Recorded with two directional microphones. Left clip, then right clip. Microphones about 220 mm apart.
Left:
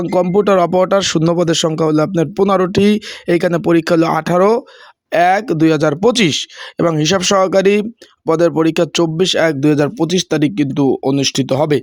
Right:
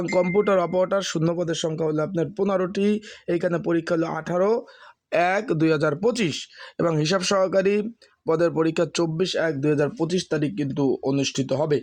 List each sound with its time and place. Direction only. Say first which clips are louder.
0.0 s speech: left 7 dB; 25° left (ahead or behind)
5.1 s speech: left 9 dB; 20° left (ahead or behind)